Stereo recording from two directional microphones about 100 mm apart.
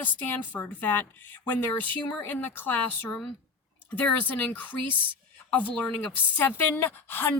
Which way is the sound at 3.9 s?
15° left (ahead or behind).